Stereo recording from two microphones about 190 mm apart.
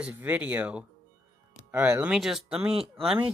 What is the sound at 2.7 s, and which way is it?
Speech, 30° right (ahead or behind).